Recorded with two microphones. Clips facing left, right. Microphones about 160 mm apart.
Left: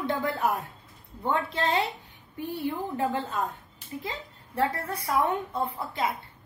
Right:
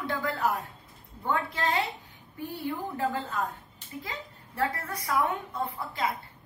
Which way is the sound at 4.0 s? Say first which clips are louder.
Left 2 dB; 25° left (ahead or behind).